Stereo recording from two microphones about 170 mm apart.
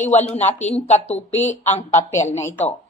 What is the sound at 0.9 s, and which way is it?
Speech, 40° left (ahead or behind).